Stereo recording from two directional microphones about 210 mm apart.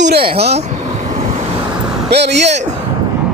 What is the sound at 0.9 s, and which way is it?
Vehicle, 35° right (ahead or behind).